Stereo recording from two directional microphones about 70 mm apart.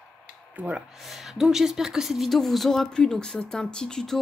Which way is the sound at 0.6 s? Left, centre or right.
Right.